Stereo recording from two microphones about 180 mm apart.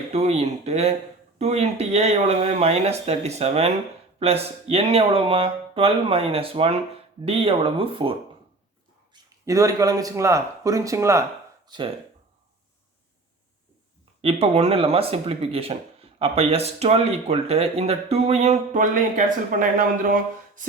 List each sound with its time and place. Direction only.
0.1 s speech: 35° right (ahead or behind)
9.5 s speech: 20° right (ahead or behind)
14.2 s speech: 35° right (ahead or behind)